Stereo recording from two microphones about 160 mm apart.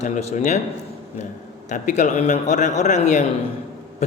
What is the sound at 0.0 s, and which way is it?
Speech, 45° left (ahead or behind).